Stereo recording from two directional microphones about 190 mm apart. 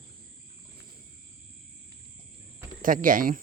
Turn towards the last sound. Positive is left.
turn(degrees=-45)  # may be behind; listen again after turning